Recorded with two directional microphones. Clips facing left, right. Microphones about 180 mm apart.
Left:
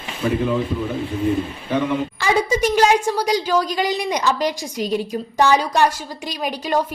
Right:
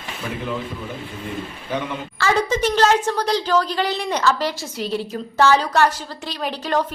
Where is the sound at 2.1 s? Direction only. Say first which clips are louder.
Right 3 dB; 15° left (ahead or behind).